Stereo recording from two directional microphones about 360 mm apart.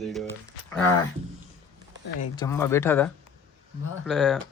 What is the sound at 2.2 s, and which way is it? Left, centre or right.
Speech, centre.